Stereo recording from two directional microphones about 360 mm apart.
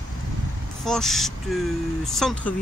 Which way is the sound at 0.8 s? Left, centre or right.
Centre.